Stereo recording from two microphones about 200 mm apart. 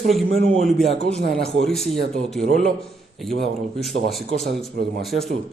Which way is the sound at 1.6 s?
Centre (ahead or behind).